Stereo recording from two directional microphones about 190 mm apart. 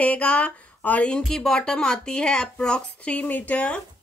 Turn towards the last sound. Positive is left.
turn(degrees=5)  # may be behind; listen again after turning